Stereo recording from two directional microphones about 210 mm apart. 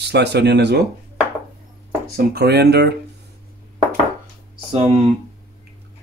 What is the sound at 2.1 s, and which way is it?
Speech, 50° right (ahead or behind).